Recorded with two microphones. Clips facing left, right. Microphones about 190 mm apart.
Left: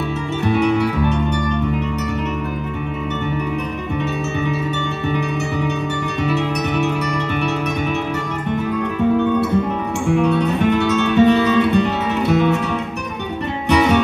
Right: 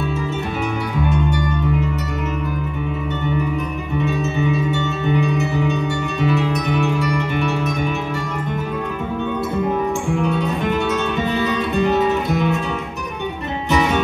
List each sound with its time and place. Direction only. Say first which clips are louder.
10.2 s music: left 4 dB; 70° left (ahead or behind)